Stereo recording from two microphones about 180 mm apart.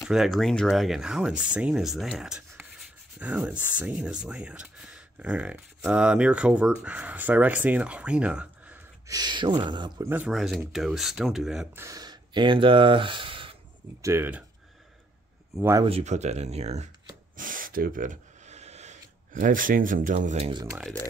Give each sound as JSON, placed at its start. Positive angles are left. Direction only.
{"t": 0.0, "sound": "speech", "side_deg": 0}
{"t": 9.1, "sound": "speech", "side_deg": -25}
{"t": 10.0, "sound": "speech", "side_deg": -10}
{"t": 11.8, "sound": "speech", "side_deg": -20}
{"t": 14.0, "sound": "speech", "side_deg": -15}
{"t": 15.5, "sound": "speech", "side_deg": -15}
{"t": 15.8, "sound": "speech", "side_deg": -35}
{"t": 17.4, "sound": "a sound", "side_deg": -50}